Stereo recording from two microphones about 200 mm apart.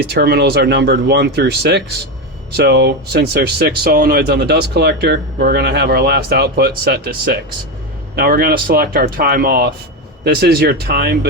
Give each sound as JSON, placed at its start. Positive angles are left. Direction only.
{"t": 0.1, "sound": "speech", "side_deg": -55}